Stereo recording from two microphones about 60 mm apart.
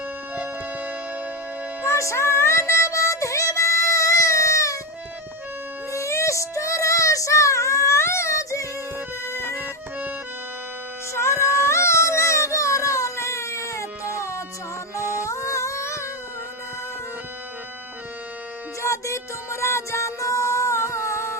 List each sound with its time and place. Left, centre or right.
0.3 s music: right
1.8 s music: left
5.9 s child singing: left
9.2 s music: left
11.1 s music: left
18.8 s music: left